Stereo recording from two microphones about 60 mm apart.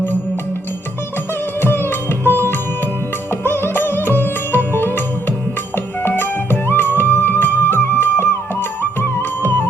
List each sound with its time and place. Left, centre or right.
1.6 s music: left